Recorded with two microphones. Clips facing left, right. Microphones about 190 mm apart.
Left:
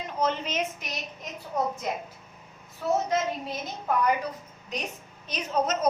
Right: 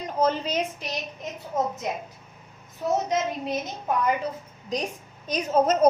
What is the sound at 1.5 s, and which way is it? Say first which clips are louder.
A woman's voice: right 1 dB; 20° right (ahead or behind).